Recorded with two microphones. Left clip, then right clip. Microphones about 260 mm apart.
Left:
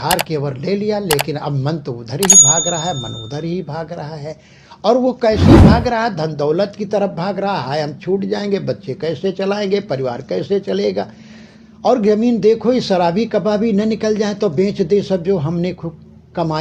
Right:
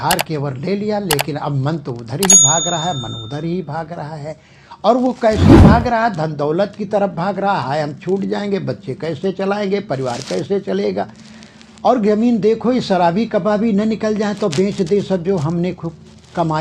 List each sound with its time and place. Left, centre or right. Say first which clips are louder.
0.3 s speech: left 2 dB; right
1.0 s speech: left 1 dB; centre
1.3 s speech: even; right
5.4 s speech: right 1 dB; centre
5.6 s speech: right 1 dB; right